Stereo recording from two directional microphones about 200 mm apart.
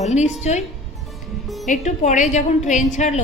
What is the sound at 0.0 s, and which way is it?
Speech, 35° left (ahead or behind).